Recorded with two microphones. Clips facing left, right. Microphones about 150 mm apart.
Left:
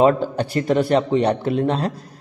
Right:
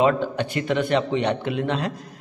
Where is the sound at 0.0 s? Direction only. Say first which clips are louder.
Left 4 dB; 35° left (ahead or behind).